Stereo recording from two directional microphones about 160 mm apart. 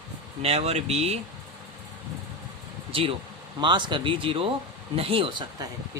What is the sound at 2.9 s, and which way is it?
Speech, 35° right (ahead or behind).